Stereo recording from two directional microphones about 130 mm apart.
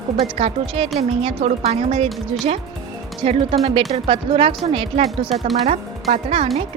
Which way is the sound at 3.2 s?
50° right (ahead or behind).